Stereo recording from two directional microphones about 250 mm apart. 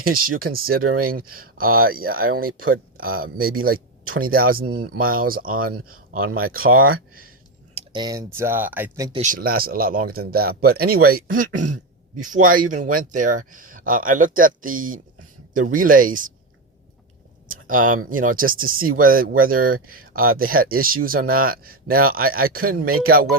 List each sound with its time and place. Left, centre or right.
0.0 s speech: right
7.8 s speech: centre
9.1 s speech: right
17.5 s speech: right